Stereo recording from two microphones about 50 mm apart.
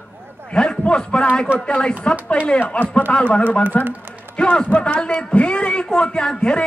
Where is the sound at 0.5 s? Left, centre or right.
Centre.